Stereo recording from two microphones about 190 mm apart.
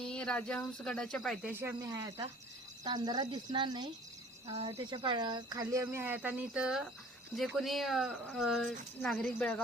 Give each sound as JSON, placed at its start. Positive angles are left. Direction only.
{"t": 0.0, "sound": "a woman's voice", "side_deg": 5}